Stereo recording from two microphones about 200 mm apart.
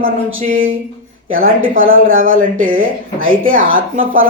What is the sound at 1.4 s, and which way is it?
Speech, 45° right (ahead or behind).